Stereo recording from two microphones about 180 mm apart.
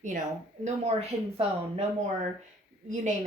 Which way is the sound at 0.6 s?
35° right (ahead or behind).